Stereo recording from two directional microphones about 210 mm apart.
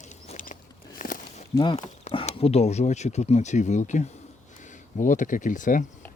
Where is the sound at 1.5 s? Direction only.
25° left (ahead or behind).